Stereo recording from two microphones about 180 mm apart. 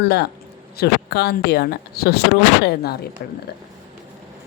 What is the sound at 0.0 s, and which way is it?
Speech, 65° left (ahead or behind).